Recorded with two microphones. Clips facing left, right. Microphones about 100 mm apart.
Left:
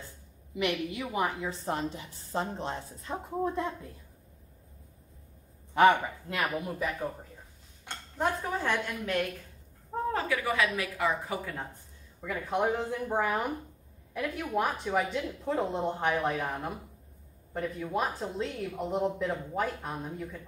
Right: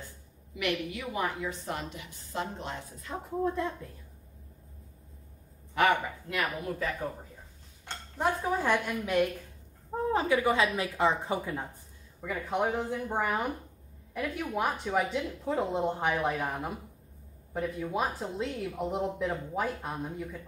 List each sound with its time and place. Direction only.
0.6 s a woman's voice: 20° left (ahead or behind)
5.8 s a woman's voice: 25° left (ahead or behind)
8.2 s a woman's voice: 10° right (ahead or behind)
12.2 s speech: centre (ahead or behind)